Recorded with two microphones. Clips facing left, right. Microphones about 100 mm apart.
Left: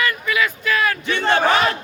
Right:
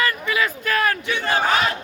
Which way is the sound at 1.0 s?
70° left (ahead or behind).